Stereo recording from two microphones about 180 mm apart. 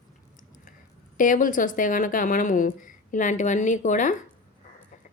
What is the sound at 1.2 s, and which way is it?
Speech, 45° left (ahead or behind).